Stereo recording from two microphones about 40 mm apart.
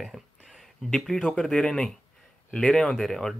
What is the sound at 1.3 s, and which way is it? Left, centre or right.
Speech, left.